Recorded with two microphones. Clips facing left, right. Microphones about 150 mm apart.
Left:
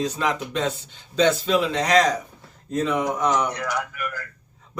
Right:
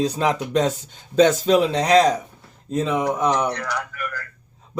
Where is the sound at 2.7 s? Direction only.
20° right (ahead or behind).